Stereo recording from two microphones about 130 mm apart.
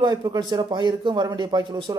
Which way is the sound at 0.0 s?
35° right (ahead or behind).